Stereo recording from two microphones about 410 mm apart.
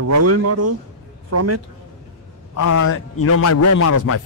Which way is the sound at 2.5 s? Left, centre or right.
Left.